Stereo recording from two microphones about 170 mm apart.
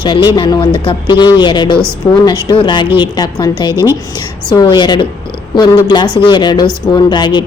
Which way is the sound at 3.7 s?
15° right (ahead or behind).